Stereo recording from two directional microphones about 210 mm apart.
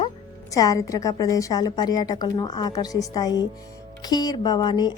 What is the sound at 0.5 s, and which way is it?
A woman's voice, 15° left (ahead or behind).